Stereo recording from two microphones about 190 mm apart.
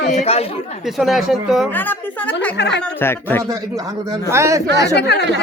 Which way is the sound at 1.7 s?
10° left (ahead or behind).